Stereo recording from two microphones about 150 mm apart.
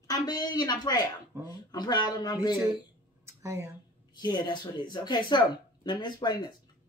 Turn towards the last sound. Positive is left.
turn(degrees=30)  # may be behind; listen again after turning